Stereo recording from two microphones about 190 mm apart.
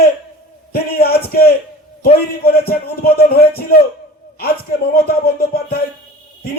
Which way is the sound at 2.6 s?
55° left (ahead or behind).